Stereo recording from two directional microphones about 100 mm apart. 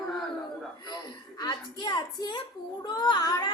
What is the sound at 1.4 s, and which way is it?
A woman's voice, 40° left (ahead or behind).